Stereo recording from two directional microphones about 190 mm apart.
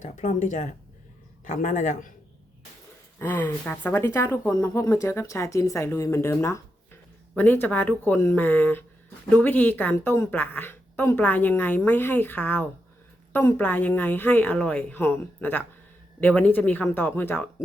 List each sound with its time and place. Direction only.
0.0 s speech: 40° left (ahead or behind)
3.2 s speech: 10° left (ahead or behind)